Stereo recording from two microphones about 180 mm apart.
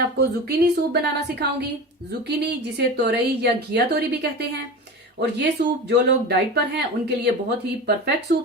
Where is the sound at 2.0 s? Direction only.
70° right (ahead or behind).